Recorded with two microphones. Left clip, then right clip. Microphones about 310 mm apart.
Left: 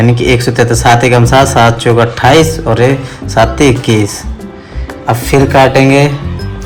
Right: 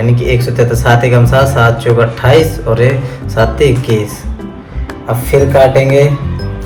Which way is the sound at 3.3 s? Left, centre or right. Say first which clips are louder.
Left 2 dB; left.